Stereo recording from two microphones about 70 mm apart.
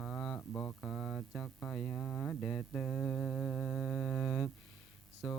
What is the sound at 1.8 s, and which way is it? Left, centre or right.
Humming, centre.